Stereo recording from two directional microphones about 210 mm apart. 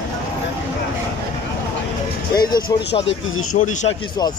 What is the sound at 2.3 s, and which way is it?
Speech, 20° left (ahead or behind).